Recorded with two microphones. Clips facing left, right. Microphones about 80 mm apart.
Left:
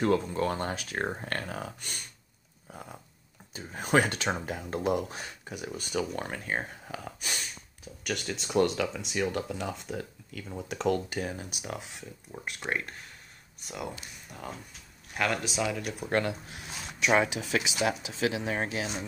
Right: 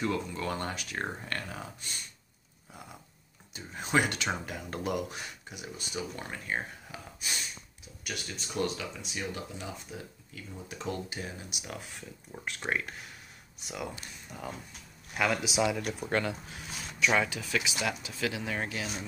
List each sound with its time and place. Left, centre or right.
0.0 s speech: left
0.5 s speech: left
1.2 s speech: left
3.5 s speech: left
6.5 s speech: left
7.1 s speech: left
8.3 s speech: left
11.3 s speech: left
12.3 s speech: centre
16.0 s speech: centre
17.0 s speech: left